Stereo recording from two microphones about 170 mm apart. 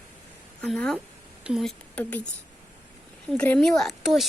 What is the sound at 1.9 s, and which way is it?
Speech, 10° left (ahead or behind).